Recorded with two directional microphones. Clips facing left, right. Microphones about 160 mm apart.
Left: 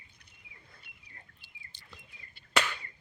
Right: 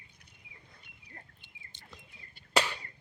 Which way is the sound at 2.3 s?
35° right (ahead or behind).